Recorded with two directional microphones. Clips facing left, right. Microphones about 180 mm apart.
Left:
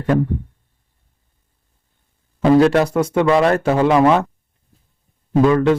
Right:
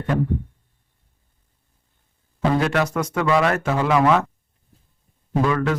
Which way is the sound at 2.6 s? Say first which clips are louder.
Left 8 dB; 35° left (ahead or behind).